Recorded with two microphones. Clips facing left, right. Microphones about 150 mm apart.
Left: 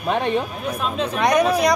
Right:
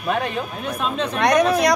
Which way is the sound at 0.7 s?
5° left (ahead or behind).